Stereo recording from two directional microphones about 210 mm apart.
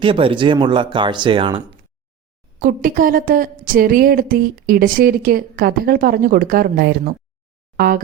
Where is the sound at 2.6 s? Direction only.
40° right (ahead or behind).